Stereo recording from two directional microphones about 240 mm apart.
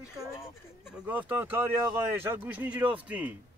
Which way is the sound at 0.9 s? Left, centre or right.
Centre.